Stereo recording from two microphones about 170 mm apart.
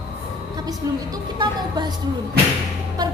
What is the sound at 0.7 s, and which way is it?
A woman's voice, 25° right (ahead or behind).